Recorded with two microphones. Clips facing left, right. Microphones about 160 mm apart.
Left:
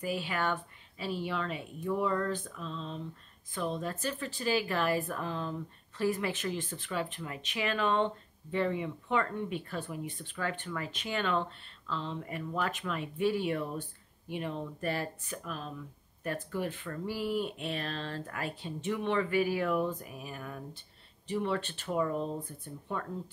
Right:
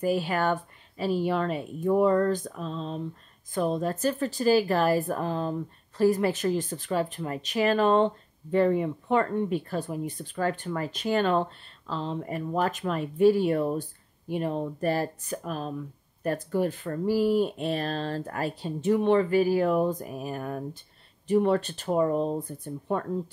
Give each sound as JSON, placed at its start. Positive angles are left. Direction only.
{"t": 0.0, "sound": "a woman's voice", "side_deg": -45}